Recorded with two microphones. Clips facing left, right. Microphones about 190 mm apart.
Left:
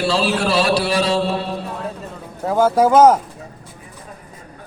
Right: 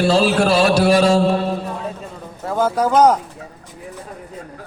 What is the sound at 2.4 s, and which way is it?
Speech, 10° left (ahead or behind).